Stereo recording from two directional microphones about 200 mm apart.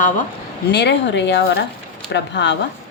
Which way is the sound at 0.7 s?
60° left (ahead or behind).